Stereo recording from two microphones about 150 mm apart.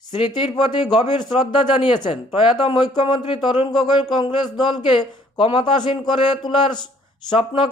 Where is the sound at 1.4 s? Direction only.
30° left (ahead or behind).